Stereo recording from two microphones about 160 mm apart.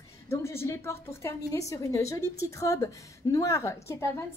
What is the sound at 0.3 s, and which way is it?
A woman's voice, 15° left (ahead or behind).